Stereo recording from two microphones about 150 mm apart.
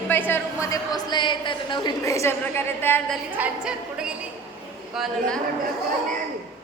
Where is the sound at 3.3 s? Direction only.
10° right (ahead or behind).